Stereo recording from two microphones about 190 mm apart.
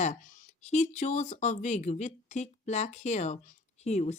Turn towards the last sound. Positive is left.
turn(degrees=35)  # may be behind; listen again after turning